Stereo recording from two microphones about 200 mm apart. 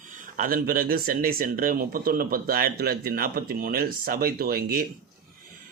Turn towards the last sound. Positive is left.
turn(degrees=-50)  # may be behind; listen again after turning